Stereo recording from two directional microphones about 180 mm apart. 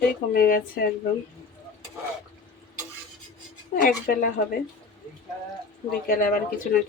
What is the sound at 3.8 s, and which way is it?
Speech, 50° left (ahead or behind).